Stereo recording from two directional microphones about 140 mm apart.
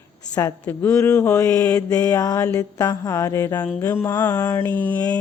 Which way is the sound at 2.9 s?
25° left (ahead or behind).